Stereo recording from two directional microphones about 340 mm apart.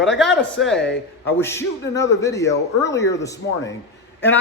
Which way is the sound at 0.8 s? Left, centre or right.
Left.